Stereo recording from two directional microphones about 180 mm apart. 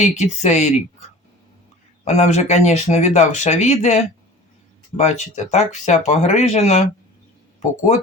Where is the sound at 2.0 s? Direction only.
40° left (ahead or behind).